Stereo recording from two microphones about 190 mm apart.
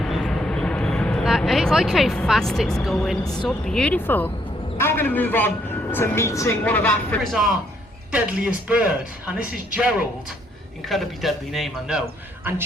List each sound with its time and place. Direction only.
0.0 s vehicle: centre (ahead or behind)
3.4 s a woman's voice: 5° left (ahead or behind)
10.8 s a man's voice: centre (ahead or behind)